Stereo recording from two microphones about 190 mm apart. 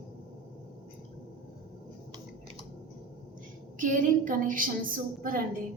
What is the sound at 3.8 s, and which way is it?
A woman's voice, 45° right (ahead or behind).